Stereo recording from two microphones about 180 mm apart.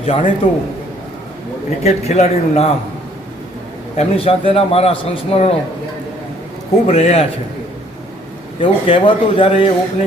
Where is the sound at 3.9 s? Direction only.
35° left (ahead or behind).